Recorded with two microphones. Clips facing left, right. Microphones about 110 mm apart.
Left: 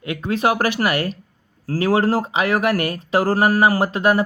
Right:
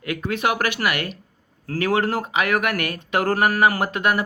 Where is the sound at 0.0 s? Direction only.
25° left (ahead or behind).